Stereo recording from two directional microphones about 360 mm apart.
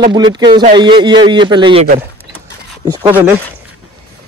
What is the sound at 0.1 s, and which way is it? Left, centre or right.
Speech, centre.